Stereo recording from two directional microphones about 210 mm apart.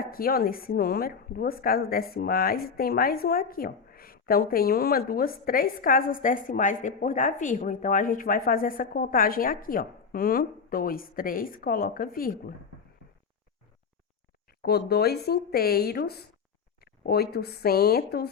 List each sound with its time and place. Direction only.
0.0 s a woman's voice: 45° left (ahead or behind)
14.6 s a woman's voice: 50° left (ahead or behind)